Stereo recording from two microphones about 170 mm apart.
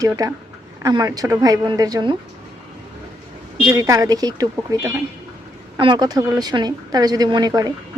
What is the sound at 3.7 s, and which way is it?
Speech, 20° right (ahead or behind).